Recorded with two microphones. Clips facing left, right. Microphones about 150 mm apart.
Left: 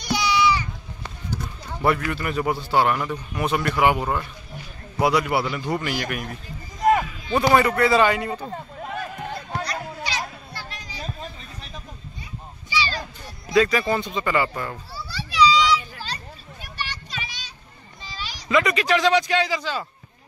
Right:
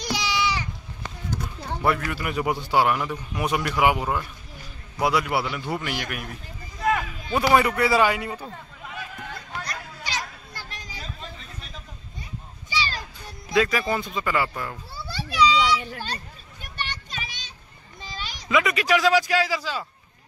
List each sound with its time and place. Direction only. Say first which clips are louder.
0.0 s a sound: left 5 dB; 90° right
1.3 s run: right 1 dB; 5° left (ahead or behind)
2.1 s a man's voice: left 1 dB; 10° right (ahead or behind)
7.5 s a man's voice: left 1 dB; 10° right (ahead or behind)
8.5 s a sound: left 7 dB; 35° left (ahead or behind)
9.7 s children playing: left 5 dB; 45° right (ahead or behind)
13.5 s speech: left 3 dB; 5° right (ahead or behind)
15.0 s children playing: left 2 dB; 50° right (ahead or behind)
16.8 s a sound: left 1 dB; 50° right (ahead or behind)
18.5 s speech: left 1 dB; 5° right (ahead or behind)